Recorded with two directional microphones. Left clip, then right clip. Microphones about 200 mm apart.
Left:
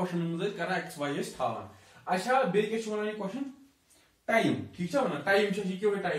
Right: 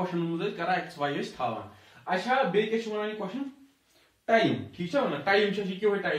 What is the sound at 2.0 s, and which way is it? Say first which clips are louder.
A man's voice: right 1 dB; centre (ahead or behind).